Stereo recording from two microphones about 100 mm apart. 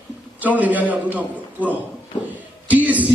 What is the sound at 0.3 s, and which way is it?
A man's voice, 15° right (ahead or behind).